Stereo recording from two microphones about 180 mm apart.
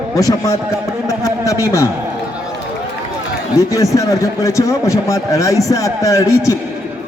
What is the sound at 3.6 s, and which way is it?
A man's voice, 15° left (ahead or behind).